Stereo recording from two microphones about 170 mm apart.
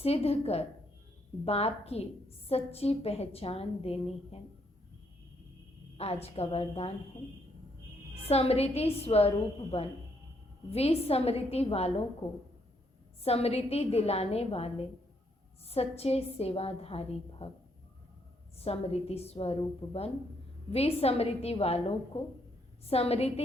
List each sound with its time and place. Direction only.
0.0 s a woman's voice: 35° left (ahead or behind)
6.0 s a woman's voice: 35° left (ahead or behind)
8.1 s a woman's voice: 35° left (ahead or behind)
13.2 s a woman's voice: 35° left (ahead or behind)
18.5 s a woman's voice: 35° left (ahead or behind)